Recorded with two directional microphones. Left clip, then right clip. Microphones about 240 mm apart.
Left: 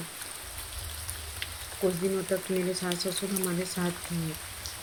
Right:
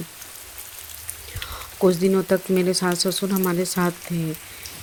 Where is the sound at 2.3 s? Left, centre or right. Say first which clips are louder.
Right 9 dB; right.